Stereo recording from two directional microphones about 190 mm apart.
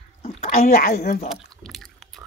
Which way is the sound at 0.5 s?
50° left (ahead or behind).